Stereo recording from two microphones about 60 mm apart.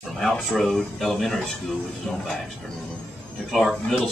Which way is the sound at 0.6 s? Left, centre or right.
Centre.